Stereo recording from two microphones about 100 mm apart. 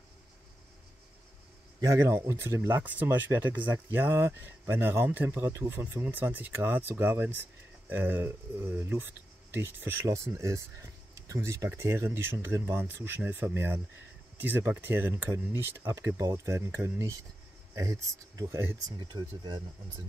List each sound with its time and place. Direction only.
1.8 s speech: 30° right (ahead or behind)
18.9 s speech: 45° right (ahead or behind)